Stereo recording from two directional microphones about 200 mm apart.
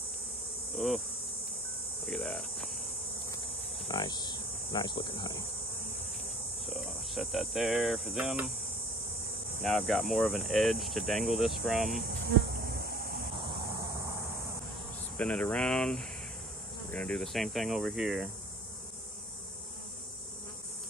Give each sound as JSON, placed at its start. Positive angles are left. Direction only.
{"t": 0.7, "sound": "speech", "side_deg": 0}
{"t": 2.0, "sound": "insect", "side_deg": 0}
{"t": 3.9, "sound": "insect", "side_deg": 20}
{"t": 6.6, "sound": "speech", "side_deg": 0}
{"t": 9.6, "sound": "speech", "side_deg": 0}
{"t": 12.8, "sound": "a sound", "side_deg": -45}
{"t": 13.4, "sound": "a sound", "side_deg": -25}
{"t": 15.1, "sound": "speech", "side_deg": 5}